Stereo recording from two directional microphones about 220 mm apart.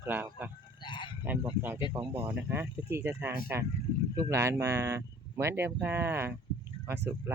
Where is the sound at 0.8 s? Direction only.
20° left (ahead or behind).